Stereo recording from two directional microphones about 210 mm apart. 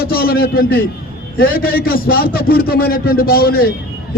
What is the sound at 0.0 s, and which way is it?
A man's voice, 45° left (ahead or behind).